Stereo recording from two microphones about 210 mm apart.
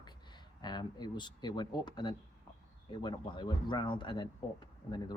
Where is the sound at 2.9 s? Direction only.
20° left (ahead or behind).